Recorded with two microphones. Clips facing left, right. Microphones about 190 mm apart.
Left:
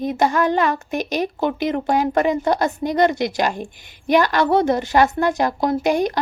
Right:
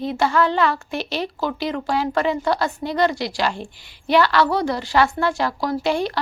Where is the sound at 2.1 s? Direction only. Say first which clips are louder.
Left 2 dB; 45° left (ahead or behind).